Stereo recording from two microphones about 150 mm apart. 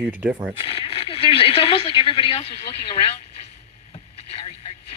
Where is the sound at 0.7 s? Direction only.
40° left (ahead or behind).